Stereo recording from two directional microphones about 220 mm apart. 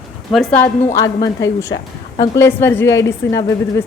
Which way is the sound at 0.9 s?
15° left (ahead or behind).